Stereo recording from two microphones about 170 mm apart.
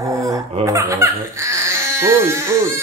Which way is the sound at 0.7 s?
15° right (ahead or behind).